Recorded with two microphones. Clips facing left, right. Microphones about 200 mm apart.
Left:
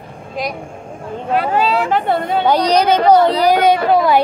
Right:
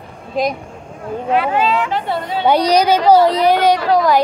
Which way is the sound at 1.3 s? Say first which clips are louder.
Left 1 dB; 40° left (ahead or behind).